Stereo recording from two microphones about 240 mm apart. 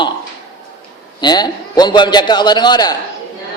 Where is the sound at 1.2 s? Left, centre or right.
Centre.